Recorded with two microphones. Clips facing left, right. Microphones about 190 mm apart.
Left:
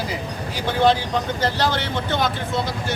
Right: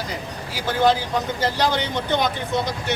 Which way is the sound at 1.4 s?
15° right (ahead or behind).